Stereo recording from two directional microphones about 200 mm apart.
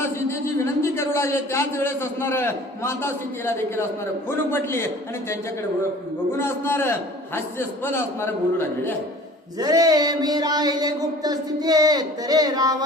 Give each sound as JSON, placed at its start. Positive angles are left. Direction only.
{"t": 0.0, "sound": "a man's voice", "side_deg": 15}
{"t": 6.4, "sound": "a man's voice", "side_deg": 10}
{"t": 9.6, "sound": "a sound", "side_deg": -20}